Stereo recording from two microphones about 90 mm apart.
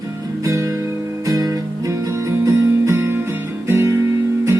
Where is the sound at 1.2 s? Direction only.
40° right (ahead or behind).